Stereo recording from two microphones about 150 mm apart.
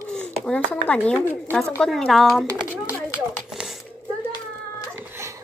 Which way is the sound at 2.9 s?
10° right (ahead or behind).